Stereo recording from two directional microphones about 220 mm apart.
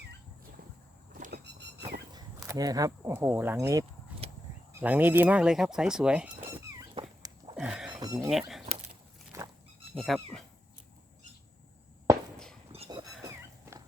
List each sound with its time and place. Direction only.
1.1 s vehicle: 45° right (ahead or behind)
2.1 s speech: 15° right (ahead or behind)
6.6 s a sound: 15° right (ahead or behind)
7.9 s speech: 15° right (ahead or behind)
8.3 s speech: centre (ahead or behind)
10.0 s speech: centre (ahead or behind)
12.1 s a sound: 15° right (ahead or behind)
12.7 s a sound: 25° right (ahead or behind)
13.2 s cat: 15° right (ahead or behind)